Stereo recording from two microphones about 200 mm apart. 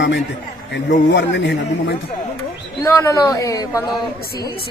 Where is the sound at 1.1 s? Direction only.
60° left (ahead or behind).